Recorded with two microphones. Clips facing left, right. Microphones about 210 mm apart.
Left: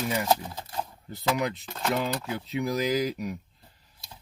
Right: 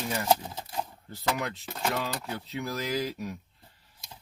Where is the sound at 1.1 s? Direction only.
15° left (ahead or behind).